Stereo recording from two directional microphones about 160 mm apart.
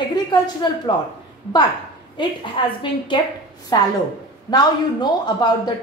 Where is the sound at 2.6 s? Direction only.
30° left (ahead or behind).